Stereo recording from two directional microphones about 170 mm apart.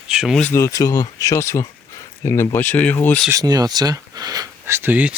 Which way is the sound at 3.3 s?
20° right (ahead or behind).